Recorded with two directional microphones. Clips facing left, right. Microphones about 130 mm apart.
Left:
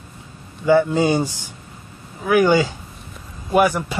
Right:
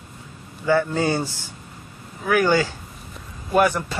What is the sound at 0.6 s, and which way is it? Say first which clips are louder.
A man's voice: left 4 dB; 15° left (ahead or behind).